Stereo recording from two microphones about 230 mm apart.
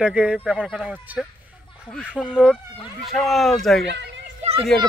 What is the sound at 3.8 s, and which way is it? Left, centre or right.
Speech, right.